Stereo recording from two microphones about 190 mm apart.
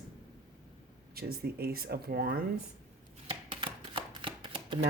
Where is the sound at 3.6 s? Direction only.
25° right (ahead or behind).